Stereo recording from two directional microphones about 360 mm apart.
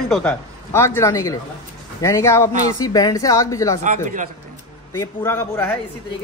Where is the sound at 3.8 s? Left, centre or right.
Right.